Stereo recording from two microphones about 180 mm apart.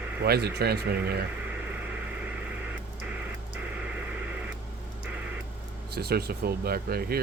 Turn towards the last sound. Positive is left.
turn(degrees=-60)  # may be behind; listen again after turning